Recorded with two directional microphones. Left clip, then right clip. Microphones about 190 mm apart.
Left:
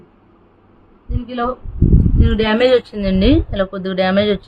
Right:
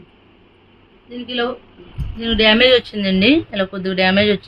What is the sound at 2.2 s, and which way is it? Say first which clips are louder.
Speech: right 3 dB; 20° left (ahead or behind).